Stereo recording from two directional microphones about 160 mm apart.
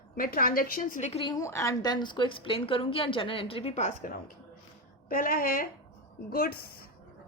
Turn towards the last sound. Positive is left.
turn(degrees=70)  # may be behind; listen again after turning